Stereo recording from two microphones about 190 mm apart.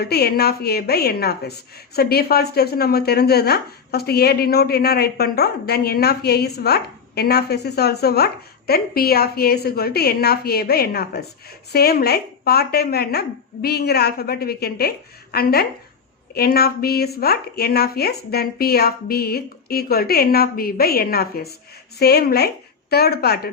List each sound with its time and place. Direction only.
0.0 s speech: 55° left (ahead or behind)